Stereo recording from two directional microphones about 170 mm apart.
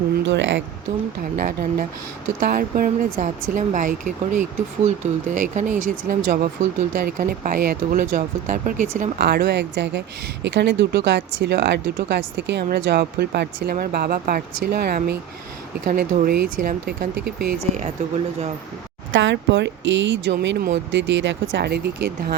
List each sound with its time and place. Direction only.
0.2 s speech: 90° right
1.4 s speech: 60° right (ahead or behind)
9.2 s speech: 75° right (ahead or behind); by 11.8 s 90° right
11.9 s speech: 80° right; by 17.8 s 60° right (ahead or behind)
19.1 s speech: 90° right; by 22.4 s 70° right (ahead or behind)